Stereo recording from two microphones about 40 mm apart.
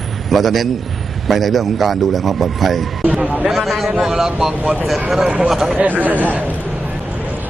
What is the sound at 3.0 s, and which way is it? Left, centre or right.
Speech, right.